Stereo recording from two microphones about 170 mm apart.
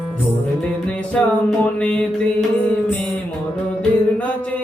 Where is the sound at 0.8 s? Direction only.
5° left (ahead or behind).